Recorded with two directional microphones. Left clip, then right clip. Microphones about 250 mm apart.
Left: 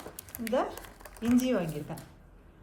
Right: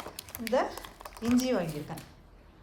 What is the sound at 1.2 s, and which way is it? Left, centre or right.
Speech, centre.